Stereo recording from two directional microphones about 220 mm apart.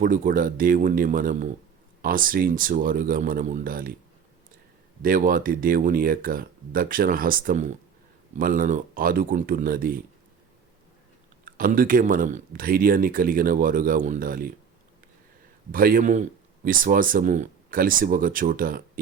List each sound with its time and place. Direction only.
0.0 s speech: 40° right (ahead or behind)
5.0 s speech: 40° right (ahead or behind)
11.4 s speech: 40° right (ahead or behind)
15.7 s speech: 40° right (ahead or behind)